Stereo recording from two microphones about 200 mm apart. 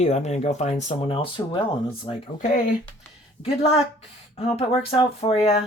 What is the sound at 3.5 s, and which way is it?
Speech, 30° left (ahead or behind).